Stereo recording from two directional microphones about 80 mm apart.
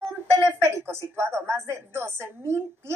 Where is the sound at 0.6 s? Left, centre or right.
Right.